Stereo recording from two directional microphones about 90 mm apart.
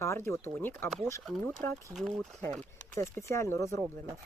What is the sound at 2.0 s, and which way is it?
Speech, 5° left (ahead or behind).